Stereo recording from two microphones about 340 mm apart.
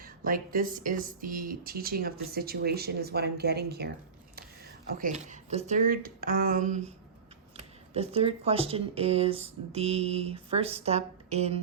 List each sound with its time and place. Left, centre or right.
0.0 s speech: right
4.9 s speech: right
9.7 s a sound: centre